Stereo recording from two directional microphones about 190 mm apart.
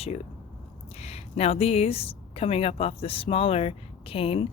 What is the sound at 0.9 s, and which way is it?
Speech, 35° left (ahead or behind).